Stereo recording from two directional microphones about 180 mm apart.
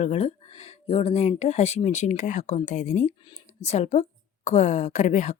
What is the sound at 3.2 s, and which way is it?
A woman's voice, 30° left (ahead or behind).